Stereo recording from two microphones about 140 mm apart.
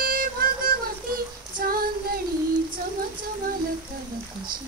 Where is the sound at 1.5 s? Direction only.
90° right.